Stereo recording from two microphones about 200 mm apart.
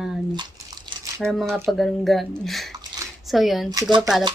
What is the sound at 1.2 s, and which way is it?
A woman's voice, centre (ahead or behind).